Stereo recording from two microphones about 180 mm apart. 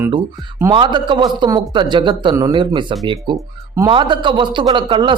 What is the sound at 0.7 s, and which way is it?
A man's voice, 25° right (ahead or behind).